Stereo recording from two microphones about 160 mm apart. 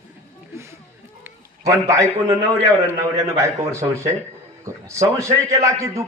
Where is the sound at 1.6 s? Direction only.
20° right (ahead or behind).